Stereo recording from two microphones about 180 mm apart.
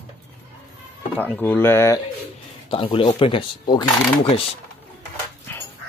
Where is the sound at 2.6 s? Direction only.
30° left (ahead or behind).